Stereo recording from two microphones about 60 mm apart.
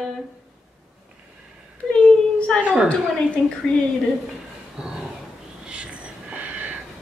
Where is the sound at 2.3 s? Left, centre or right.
Centre.